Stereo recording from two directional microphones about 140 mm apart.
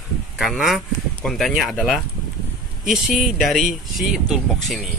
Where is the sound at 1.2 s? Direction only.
Centre (ahead or behind).